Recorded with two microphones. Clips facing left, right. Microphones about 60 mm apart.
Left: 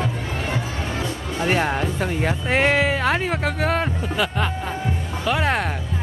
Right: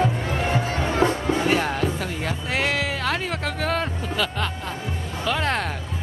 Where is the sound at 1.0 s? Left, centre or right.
Right.